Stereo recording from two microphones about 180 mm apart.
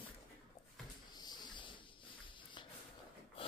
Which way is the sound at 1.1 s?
25° left (ahead or behind).